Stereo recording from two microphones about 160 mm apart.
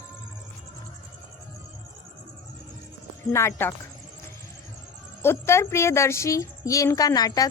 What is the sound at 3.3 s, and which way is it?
Speech, 15° left (ahead or behind).